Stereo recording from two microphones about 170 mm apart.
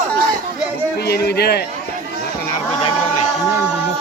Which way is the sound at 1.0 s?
70° left (ahead or behind).